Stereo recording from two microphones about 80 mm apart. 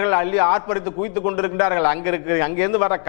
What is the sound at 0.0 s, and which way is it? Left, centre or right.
A man's voice, left.